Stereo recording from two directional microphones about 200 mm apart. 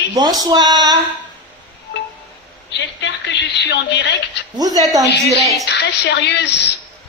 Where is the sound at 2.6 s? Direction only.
65° left (ahead or behind).